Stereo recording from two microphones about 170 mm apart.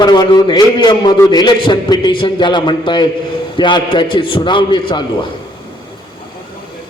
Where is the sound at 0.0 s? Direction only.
25° left (ahead or behind).